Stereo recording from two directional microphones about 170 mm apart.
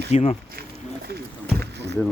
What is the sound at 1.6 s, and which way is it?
Rowboat, 80° right.